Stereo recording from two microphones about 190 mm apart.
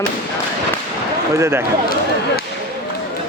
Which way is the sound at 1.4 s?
10° right (ahead or behind).